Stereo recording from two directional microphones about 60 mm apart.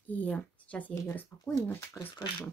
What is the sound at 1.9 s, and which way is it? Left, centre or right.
Speech, centre.